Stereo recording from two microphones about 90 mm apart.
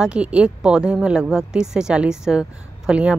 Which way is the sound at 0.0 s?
10° right (ahead or behind).